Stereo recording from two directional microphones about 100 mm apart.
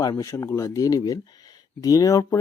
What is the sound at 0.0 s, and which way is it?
Speech, 40° left (ahead or behind).